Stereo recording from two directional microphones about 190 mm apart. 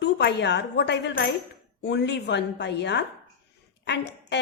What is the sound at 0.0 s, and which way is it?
A woman's voice, 65° left (ahead or behind).